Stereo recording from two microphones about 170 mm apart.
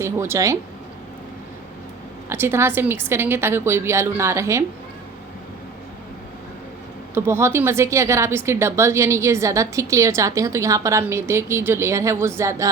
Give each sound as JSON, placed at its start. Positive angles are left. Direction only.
{"t": 0.0, "sound": "a woman's voice", "side_deg": -15}
{"t": 2.3, "sound": "a woman's voice", "side_deg": -15}
{"t": 7.1, "sound": "a woman's voice", "side_deg": -15}